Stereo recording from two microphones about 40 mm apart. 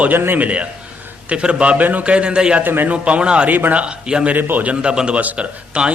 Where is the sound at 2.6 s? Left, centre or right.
Right.